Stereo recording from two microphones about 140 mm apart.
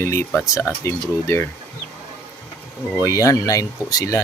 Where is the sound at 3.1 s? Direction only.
25° left (ahead or behind).